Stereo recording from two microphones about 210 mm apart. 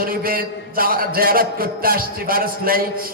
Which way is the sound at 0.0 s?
45° right (ahead or behind).